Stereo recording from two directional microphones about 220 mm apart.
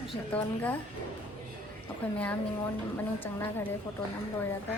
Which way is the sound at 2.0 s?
10° left (ahead or behind).